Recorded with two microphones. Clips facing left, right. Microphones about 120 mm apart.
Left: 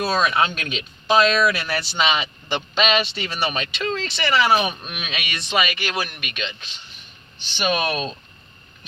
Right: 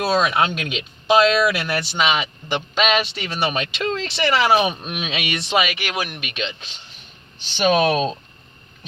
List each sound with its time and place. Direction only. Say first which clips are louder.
0.0 s speech: right 2 dB; 20° right (ahead or behind)
3.3 s speech: right 3 dB; 20° right (ahead or behind)
7.5 s speech: right 6 dB; 35° right (ahead or behind)